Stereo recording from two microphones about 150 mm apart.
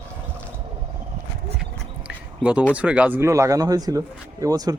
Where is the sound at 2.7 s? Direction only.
10° right (ahead or behind).